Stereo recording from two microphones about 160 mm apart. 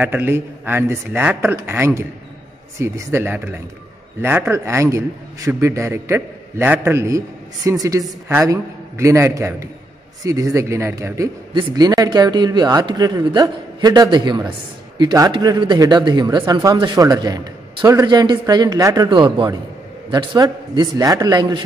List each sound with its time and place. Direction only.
0.0 s a man's voice: 10° right (ahead or behind)
19.0 s a man's voice: 30° right (ahead or behind)